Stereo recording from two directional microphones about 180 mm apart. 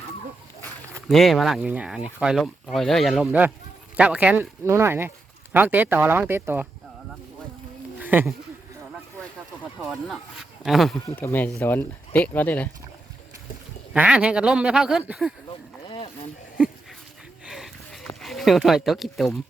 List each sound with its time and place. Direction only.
1.0 s speech: centre (ahead or behind)
7.9 s a sound: 10° right (ahead or behind)
10.6 s speech: centre (ahead or behind)
11.0 s speech: 10° left (ahead or behind)
13.9 s speech: 5° right (ahead or behind)
15.9 s boat: 30° left (ahead or behind)
17.4 s a sound: centre (ahead or behind)
18.2 s speech: centre (ahead or behind)